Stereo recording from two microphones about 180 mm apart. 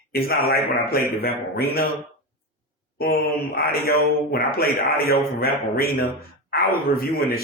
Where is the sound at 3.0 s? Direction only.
55° left (ahead or behind).